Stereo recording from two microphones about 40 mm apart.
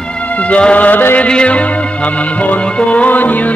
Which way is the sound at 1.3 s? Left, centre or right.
Left.